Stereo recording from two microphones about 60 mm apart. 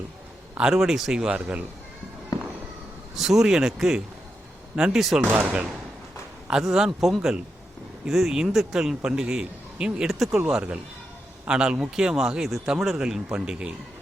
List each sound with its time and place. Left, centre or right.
0.5 s a man's voice: centre
3.2 s a man's voice: centre
6.5 s a man's voice: centre